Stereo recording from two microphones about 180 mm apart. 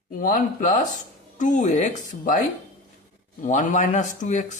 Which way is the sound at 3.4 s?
45° left (ahead or behind).